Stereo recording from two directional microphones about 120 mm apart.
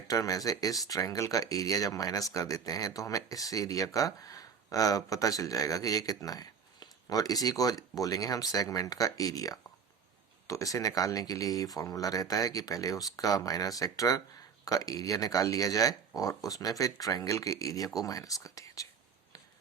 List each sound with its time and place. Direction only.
0.1 s speech: 30° left (ahead or behind)